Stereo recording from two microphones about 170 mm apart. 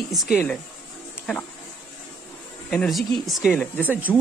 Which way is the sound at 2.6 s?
Centre (ahead or behind).